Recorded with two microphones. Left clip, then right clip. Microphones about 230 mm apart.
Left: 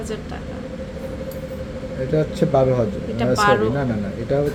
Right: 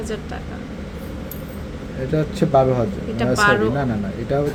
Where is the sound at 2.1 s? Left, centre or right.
Centre.